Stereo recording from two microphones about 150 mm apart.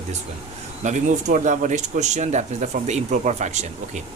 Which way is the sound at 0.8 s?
55° right (ahead or behind).